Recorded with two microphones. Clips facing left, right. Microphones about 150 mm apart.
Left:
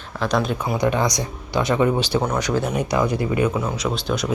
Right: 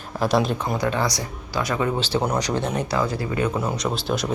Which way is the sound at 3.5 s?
Centre (ahead or behind).